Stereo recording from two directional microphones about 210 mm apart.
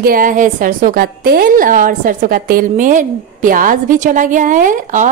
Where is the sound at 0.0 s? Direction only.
40° right (ahead or behind).